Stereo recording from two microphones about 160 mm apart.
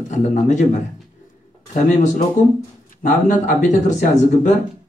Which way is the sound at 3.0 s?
50° left (ahead or behind).